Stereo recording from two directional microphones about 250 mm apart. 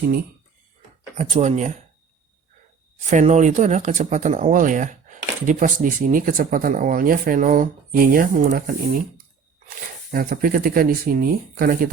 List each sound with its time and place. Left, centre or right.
1.1 s speech: right
3.1 s speech: right
10.1 s speech: right